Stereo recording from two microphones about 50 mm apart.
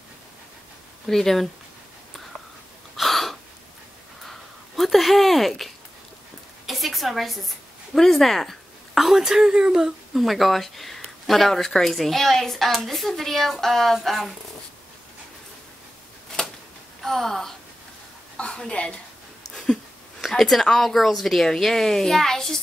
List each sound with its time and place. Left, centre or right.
1.0 s speech: centre
3.0 s gasp: centre
4.2 s a sound: centre
9.0 s speech: centre
10.1 s speech: centre
17.0 s speech: centre
18.4 s a woman's voice: left
19.5 s a sound: centre
20.3 s a child's voice: centre